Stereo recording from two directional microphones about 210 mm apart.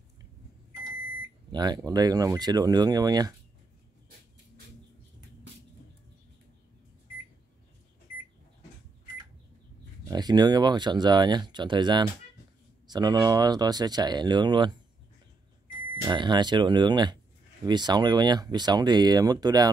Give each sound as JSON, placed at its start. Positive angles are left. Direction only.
{"t": 1.5, "sound": "speech", "side_deg": -20}
{"t": 10.0, "sound": "speech", "side_deg": -20}
{"t": 16.1, "sound": "speech", "side_deg": -20}